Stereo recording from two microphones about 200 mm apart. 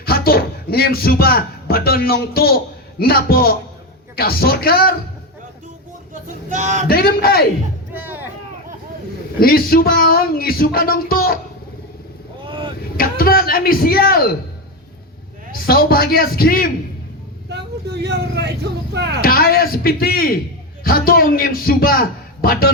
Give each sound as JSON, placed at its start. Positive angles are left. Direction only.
{"t": 0.0, "sound": "a man's voice", "side_deg": 50}
{"t": 6.2, "sound": "a sound", "side_deg": -40}
{"t": 6.8, "sound": "speech", "side_deg": 50}
{"t": 7.9, "sound": "a sound", "side_deg": -10}
{"t": 9.4, "sound": "speech", "side_deg": 50}
{"t": 12.5, "sound": "vehicle", "side_deg": -25}
{"t": 13.0, "sound": "speech", "side_deg": 45}
{"t": 15.5, "sound": "speech", "side_deg": 50}
{"t": 17.5, "sound": "speech", "side_deg": -55}
{"t": 19.2, "sound": "speech", "side_deg": 50}